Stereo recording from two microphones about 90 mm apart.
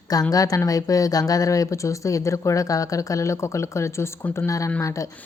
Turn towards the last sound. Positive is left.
turn(degrees=35)  # may be behind; listen again after turning